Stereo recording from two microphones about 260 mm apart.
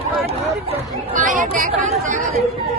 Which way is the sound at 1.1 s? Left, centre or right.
Right.